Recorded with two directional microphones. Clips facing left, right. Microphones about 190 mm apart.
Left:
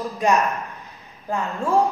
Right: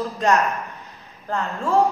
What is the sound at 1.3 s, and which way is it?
Speech, 15° left (ahead or behind).